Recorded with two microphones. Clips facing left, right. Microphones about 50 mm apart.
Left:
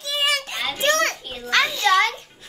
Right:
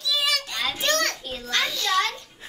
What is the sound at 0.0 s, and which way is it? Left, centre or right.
Children playing, left.